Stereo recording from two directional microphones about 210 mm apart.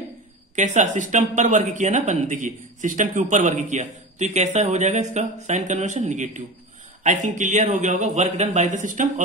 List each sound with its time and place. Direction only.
0.6 s speech: 35° right (ahead or behind)